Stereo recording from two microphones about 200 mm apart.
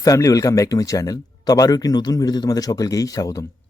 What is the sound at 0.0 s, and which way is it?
Speech, 15° left (ahead or behind).